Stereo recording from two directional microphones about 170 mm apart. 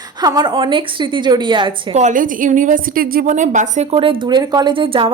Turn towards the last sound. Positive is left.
turn(degrees=-30)  # may be behind; listen again after turning